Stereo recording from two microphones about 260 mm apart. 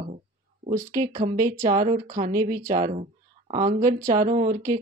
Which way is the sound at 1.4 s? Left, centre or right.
Centre.